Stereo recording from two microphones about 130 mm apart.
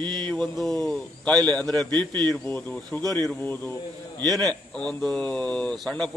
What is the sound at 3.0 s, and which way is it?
Speech, 30° right (ahead or behind).